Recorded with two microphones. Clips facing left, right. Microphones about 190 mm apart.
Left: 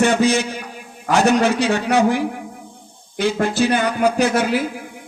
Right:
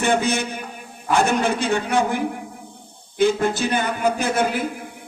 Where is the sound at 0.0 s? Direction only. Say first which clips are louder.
Left 4 dB; 55° right (ahead or behind).